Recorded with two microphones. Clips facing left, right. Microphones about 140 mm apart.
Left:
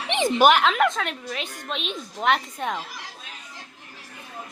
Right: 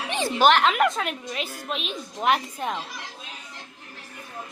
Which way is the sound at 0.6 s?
Centre (ahead or behind).